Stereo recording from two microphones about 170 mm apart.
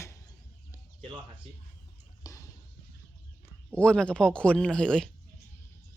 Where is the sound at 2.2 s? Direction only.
20° left (ahead or behind).